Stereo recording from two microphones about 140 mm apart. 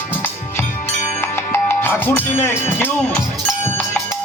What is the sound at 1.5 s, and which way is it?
Music, 15° left (ahead or behind).